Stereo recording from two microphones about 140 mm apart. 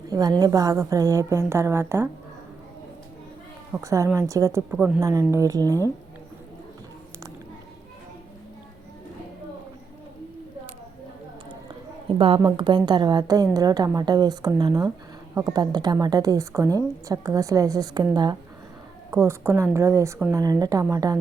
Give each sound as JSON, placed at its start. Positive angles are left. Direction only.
{"t": 0.1, "sound": "a woman's voice", "side_deg": -25}
{"t": 3.8, "sound": "a woman's voice", "side_deg": -20}
{"t": 12.0, "sound": "a sound", "side_deg": -40}
{"t": 12.4, "sound": "a woman's voice", "side_deg": -25}
{"t": 19.1, "sound": "a woman's voice", "side_deg": -20}